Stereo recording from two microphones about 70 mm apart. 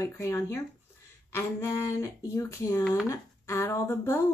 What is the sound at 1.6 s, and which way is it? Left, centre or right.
Speech, left.